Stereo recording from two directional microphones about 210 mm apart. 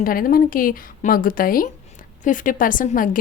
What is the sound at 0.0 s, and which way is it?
A woman's voice, 40° left (ahead or behind).